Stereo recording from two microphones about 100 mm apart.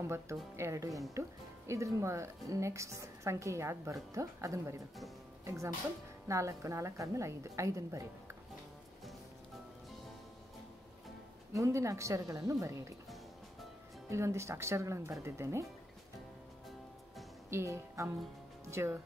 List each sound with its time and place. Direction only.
0.0 s a woman's voice: 30° right (ahead or behind)
11.5 s a woman's voice: 30° right (ahead or behind)
14.0 s a woman's voice: 30° right (ahead or behind)
17.5 s a woman's voice: 25° right (ahead or behind)